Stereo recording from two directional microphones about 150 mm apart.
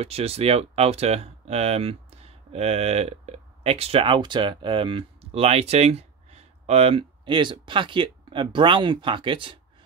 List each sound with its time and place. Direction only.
0.0 s speech: 40° right (ahead or behind)